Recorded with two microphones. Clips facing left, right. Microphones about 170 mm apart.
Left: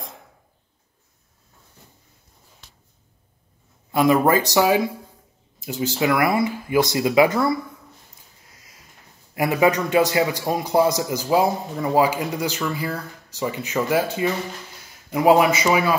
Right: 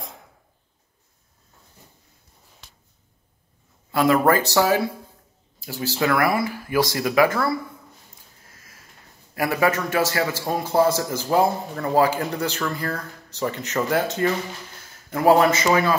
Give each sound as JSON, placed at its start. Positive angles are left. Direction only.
{"t": 3.9, "sound": "a man's voice", "side_deg": 15}
{"t": 8.5, "sound": "a sound", "side_deg": 15}
{"t": 9.3, "sound": "a man's voice", "side_deg": 20}